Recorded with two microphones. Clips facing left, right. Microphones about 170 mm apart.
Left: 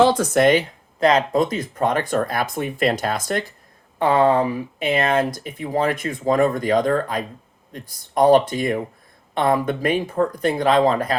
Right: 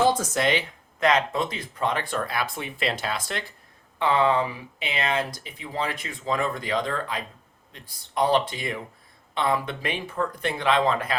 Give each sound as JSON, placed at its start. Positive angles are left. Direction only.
{"t": 0.0, "sound": "speech", "side_deg": 70}
{"t": 0.9, "sound": "speech", "side_deg": 35}